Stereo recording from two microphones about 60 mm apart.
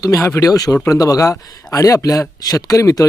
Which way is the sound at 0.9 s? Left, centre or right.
Left.